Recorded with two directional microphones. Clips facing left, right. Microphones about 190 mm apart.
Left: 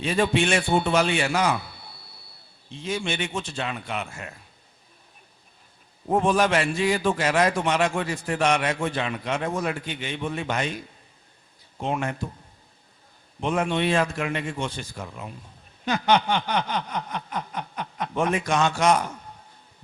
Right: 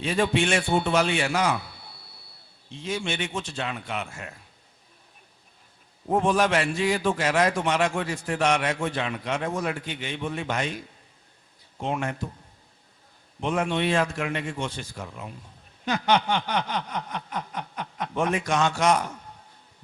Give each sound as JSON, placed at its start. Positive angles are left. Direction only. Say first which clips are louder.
{"t": 0.0, "sound": "a man's voice", "louder": "left 1 dB", "side_deg": 10}
{"t": 2.8, "sound": "a man's voice", "louder": "left 1 dB", "side_deg": 10}
{"t": 6.2, "sound": "a man's voice", "louder": "left 1 dB", "side_deg": 10}
{"t": 11.9, "sound": "a man's voice", "louder": "left 1 dB", "side_deg": 15}
{"t": 13.4, "sound": "a man's voice", "louder": "left 1 dB", "side_deg": 10}